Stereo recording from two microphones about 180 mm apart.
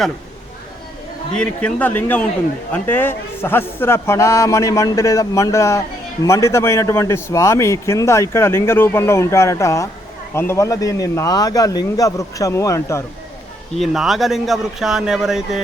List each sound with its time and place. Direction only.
1.3 s a man's voice: 5° left (ahead or behind)
13.7 s a man's voice: centre (ahead or behind)